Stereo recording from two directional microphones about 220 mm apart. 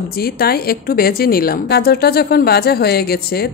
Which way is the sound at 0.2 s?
45° left (ahead or behind).